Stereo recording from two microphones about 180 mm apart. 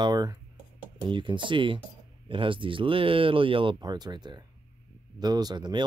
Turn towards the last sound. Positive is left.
turn(degrees=-25)  # may be behind; listen again after turning